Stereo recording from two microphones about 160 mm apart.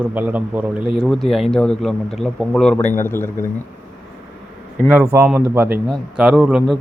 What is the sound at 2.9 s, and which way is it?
Speech, 15° left (ahead or behind).